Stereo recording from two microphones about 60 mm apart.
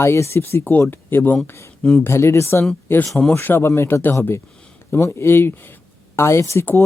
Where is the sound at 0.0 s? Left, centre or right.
Left.